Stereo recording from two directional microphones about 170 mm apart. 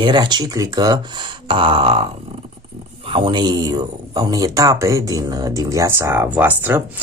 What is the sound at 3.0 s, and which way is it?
Speech, 30° right (ahead or behind).